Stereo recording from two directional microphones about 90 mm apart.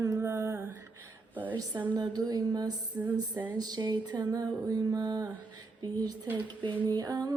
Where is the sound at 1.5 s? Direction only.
50° right (ahead or behind).